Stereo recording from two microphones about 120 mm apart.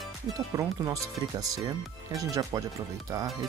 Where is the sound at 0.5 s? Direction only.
25° right (ahead or behind).